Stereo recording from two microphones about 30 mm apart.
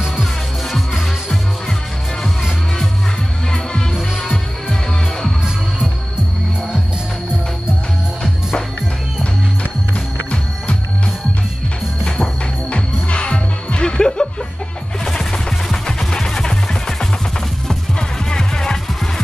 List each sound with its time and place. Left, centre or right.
12.7 s music: left
13.8 s music: left
18.3 s music: left